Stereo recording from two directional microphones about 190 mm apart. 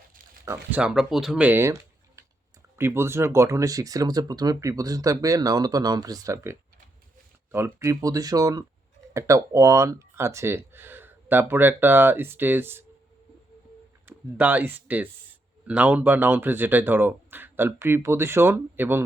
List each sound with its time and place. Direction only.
0.4 s speech: 10° right (ahead or behind)
14.1 s speech: 10° right (ahead or behind)